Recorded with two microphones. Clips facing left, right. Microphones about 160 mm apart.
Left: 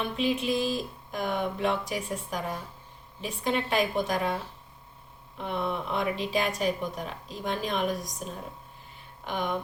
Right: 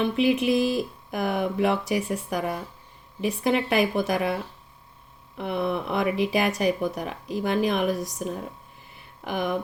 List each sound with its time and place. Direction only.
0.2 s speech: 65° right (ahead or behind)
5.4 s speech: 75° right (ahead or behind)
9.2 s speech: 70° right (ahead or behind)